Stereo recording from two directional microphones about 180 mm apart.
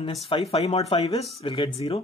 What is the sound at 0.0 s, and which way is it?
Speech, 30° left (ahead or behind).